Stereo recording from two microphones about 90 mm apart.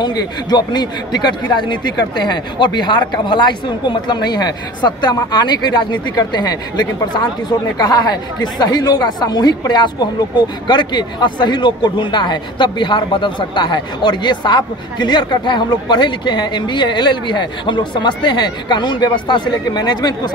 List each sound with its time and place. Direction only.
0.0 s a man's voice: 50° left (ahead or behind)